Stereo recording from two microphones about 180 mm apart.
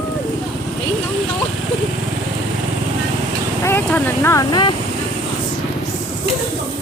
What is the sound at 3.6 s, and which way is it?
Speech, 10° left (ahead or behind).